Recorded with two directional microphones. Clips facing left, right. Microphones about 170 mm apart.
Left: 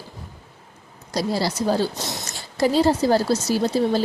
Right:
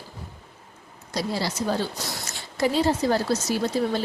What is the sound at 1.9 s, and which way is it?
Speech, 20° left (ahead or behind).